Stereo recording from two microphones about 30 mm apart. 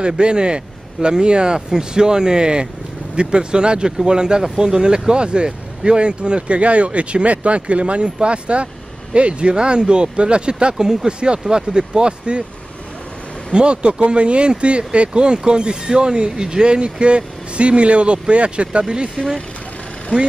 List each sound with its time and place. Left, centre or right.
0.0 s speech: right
13.5 s speech: right